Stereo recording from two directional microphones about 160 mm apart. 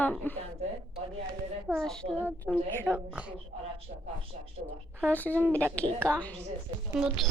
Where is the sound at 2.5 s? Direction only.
15° left (ahead or behind).